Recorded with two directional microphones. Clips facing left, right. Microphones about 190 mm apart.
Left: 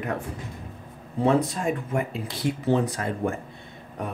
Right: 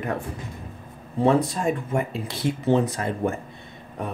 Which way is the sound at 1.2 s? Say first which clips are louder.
Right 2 dB; 30° right (ahead or behind).